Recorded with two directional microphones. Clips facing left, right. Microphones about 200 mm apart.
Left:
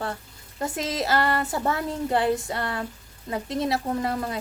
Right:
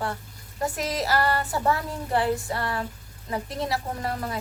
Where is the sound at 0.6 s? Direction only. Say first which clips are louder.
Even; 25° left (ahead or behind).